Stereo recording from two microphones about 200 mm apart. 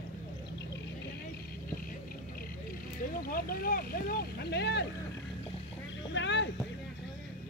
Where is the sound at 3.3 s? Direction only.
50° left (ahead or behind).